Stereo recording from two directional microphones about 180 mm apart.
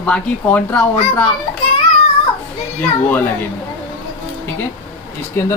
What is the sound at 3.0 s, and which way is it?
Speech, 10° left (ahead or behind).